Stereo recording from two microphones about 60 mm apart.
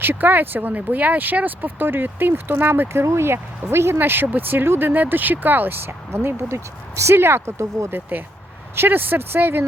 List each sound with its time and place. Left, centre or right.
0.0 s speech: right
6.1 s speech: right
7.9 s speech: right